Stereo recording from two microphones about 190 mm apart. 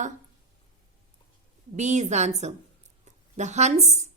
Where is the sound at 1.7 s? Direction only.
40° right (ahead or behind).